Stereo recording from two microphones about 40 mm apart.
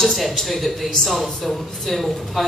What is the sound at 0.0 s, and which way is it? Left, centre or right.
A woman's voice, centre.